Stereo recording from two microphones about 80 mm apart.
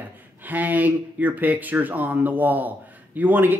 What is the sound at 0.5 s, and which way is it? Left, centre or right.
Speech, right.